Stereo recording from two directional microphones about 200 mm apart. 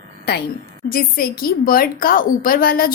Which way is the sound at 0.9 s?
45° left (ahead or behind).